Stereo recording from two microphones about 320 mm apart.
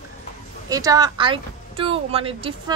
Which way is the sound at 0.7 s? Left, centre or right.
Centre.